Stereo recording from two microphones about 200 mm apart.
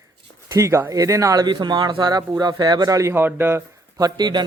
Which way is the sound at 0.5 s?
15° right (ahead or behind).